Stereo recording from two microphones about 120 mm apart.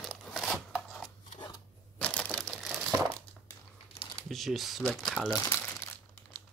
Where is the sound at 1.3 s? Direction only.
40° left (ahead or behind).